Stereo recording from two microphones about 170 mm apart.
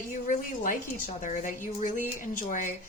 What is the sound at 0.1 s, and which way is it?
A woman's voice, 50° left (ahead or behind).